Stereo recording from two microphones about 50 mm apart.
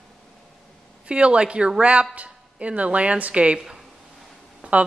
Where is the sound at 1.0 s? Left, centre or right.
Right.